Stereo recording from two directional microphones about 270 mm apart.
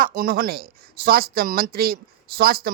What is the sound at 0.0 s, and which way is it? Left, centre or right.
A man's voice, right.